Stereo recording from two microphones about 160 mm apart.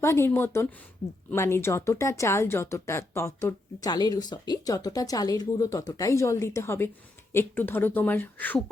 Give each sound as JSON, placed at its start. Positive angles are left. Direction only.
{"t": 0.0, "sound": "speech", "side_deg": 15}